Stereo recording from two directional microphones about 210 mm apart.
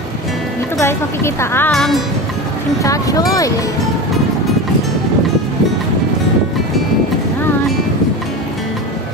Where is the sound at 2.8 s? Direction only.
15° left (ahead or behind).